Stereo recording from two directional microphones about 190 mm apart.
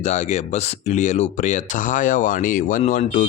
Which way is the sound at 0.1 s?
40° left (ahead or behind).